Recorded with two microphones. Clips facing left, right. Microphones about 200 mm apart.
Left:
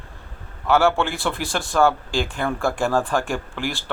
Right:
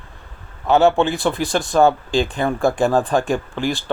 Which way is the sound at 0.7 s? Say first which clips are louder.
Right 4 dB; 20° right (ahead or behind).